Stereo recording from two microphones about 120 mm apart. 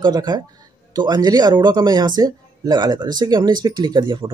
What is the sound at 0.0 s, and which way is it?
Speech, 35° right (ahead or behind).